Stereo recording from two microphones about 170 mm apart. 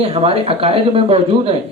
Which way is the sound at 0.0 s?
35° right (ahead or behind).